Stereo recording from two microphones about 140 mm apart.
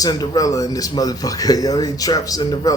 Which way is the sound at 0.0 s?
25° left (ahead or behind).